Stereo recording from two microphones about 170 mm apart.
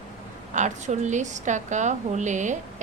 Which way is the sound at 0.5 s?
45° right (ahead or behind).